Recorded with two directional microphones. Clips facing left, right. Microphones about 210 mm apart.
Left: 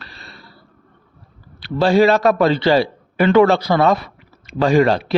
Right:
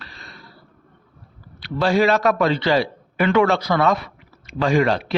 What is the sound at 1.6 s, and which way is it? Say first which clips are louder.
A man's voice: left 4 dB; 30° left (ahead or behind).